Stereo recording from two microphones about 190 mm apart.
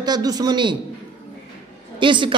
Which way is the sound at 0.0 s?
20° right (ahead or behind).